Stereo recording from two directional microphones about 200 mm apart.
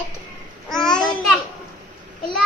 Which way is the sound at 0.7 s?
Centre (ahead or behind).